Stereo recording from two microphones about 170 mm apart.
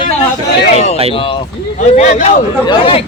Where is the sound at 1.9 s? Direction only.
45° left (ahead or behind).